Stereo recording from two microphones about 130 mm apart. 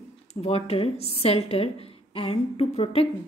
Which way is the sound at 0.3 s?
55° left (ahead or behind).